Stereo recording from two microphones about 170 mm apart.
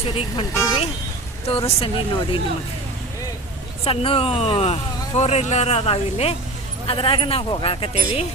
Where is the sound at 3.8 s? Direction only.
30° left (ahead or behind).